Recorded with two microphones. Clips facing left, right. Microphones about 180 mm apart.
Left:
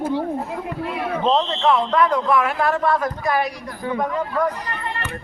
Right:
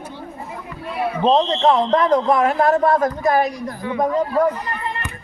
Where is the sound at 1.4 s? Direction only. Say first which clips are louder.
Right 3 dB; 40° right (ahead or behind).